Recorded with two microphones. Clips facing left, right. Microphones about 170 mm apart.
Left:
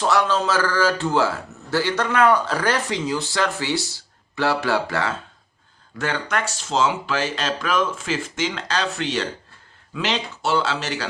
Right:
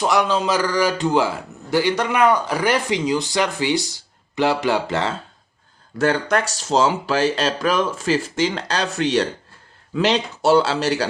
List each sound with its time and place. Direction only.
0.0 s a man's voice: 15° right (ahead or behind)
6.0 s speech: 40° right (ahead or behind)